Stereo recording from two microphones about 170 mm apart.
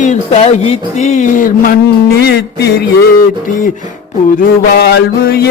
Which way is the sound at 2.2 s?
70° left (ahead or behind).